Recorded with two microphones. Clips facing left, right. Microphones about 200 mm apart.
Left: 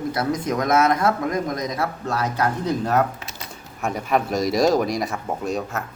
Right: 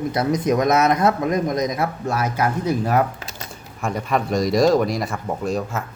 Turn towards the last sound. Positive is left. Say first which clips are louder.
# right 2 dB
turn(degrees=0)  # may be behind; listen again after turning